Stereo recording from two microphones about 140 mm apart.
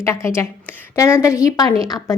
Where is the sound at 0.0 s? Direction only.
20° left (ahead or behind).